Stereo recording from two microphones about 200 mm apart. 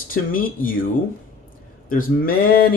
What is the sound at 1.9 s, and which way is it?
Speech, 45° left (ahead or behind).